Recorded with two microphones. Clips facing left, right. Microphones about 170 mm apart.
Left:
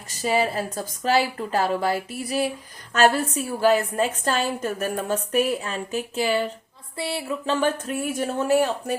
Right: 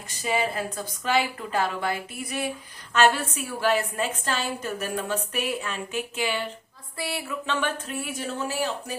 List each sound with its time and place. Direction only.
0.2 s a woman's voice: 35° left (ahead or behind); by 9.0 s 55° left (ahead or behind)